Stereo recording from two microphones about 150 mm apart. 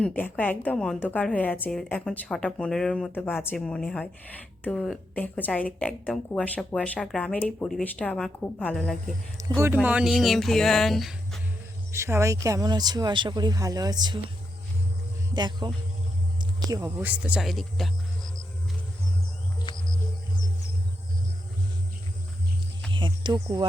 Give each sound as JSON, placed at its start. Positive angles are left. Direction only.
{"t": 0.0, "sound": "speech", "side_deg": 10}
{"t": 9.4, "sound": "a sound", "side_deg": -20}
{"t": 9.8, "sound": "music", "side_deg": -5}
{"t": 11.9, "sound": "a man's voice", "side_deg": -15}
{"t": 15.4, "sound": "a man's voice", "side_deg": -30}
{"t": 16.4, "sound": "a sound", "side_deg": -25}
{"t": 16.8, "sound": "music", "side_deg": -10}
{"t": 19.7, "sound": "music", "side_deg": 30}
{"t": 22.9, "sound": "a sound", "side_deg": -30}